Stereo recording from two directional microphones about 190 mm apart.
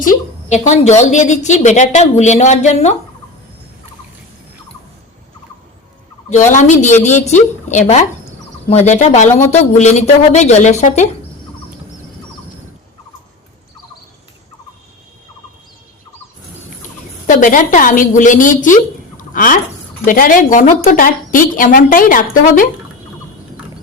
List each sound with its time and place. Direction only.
0.0 s a woman's voice: 40° left (ahead or behind)
6.5 s a woman's voice: 40° left (ahead or behind)
17.2 s a woman's voice: 45° left (ahead or behind)
19.1 s a sound: 45° left (ahead or behind)
20.1 s a woman's voice: 45° left (ahead or behind)